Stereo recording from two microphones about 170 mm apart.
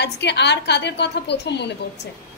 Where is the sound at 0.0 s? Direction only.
90° left.